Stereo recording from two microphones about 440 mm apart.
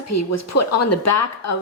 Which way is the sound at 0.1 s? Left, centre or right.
Left.